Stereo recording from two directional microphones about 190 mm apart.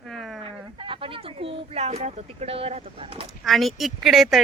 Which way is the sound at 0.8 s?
25° right (ahead or behind).